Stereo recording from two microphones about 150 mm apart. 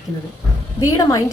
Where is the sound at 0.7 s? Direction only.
25° left (ahead or behind).